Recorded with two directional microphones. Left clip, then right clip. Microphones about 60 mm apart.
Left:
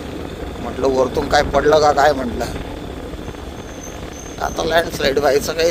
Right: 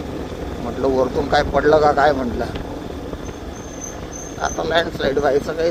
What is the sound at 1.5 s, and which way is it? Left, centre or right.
Speech, left.